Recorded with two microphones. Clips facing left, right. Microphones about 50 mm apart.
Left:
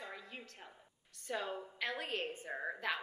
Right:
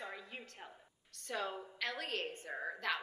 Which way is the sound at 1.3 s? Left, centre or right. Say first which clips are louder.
Even; centre.